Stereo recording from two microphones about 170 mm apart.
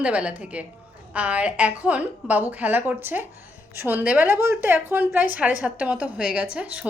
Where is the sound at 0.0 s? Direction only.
5° right (ahead or behind).